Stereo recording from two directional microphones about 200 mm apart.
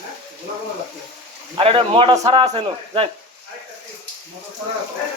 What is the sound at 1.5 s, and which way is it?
A man's voice, 25° right (ahead or behind).